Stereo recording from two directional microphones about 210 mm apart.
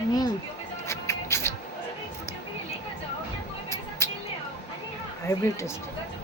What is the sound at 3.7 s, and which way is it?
Music, 15° left (ahead or behind).